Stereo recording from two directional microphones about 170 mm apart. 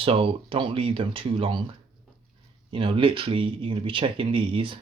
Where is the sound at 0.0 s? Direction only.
30° right (ahead or behind).